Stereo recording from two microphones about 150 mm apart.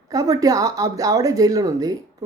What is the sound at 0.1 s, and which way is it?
Speech, 25° right (ahead or behind).